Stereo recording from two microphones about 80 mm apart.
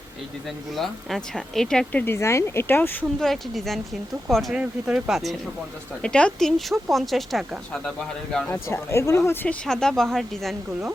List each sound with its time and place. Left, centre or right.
0.8 s speech: centre
1.9 s speech: centre
2.1 s speech: left
3.2 s speech: centre
4.5 s speech: centre
4.9 s speech: centre
6.0 s speech: centre
6.9 s speech: centre
8.4 s speech: left
9.5 s speech: centre